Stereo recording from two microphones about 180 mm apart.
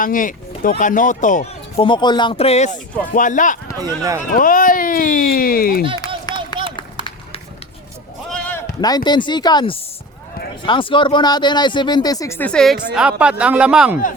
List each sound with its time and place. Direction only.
0.0 s speech: 50° left (ahead or behind)
1.8 s speech: 25° left (ahead or behind); by 3.6 s 45° left (ahead or behind)
3.8 s speech: 20° right (ahead or behind)
4.3 s speech: 50° left (ahead or behind)
6.3 s a sound: 25° left (ahead or behind)
8.3 s bleat: 5° left (ahead or behind)
8.8 s speech: 25° left (ahead or behind); by 14.0 s 5° right (ahead or behind)